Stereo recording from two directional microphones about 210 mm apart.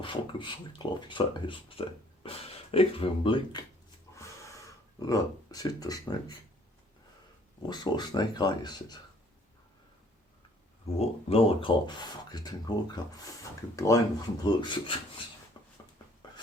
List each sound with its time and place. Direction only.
0.0 s speech: 25° left (ahead or behind)
4.9 s speech: 15° left (ahead or behind)
7.7 s speech: 20° left (ahead or behind)
10.9 s speech: 30° left (ahead or behind)
15.6 s a sound: 20° left (ahead or behind)